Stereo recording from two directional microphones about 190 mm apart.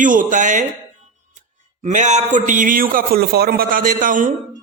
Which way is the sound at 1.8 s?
40° right (ahead or behind).